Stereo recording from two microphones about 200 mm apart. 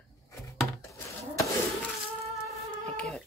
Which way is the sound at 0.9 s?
15° left (ahead or behind).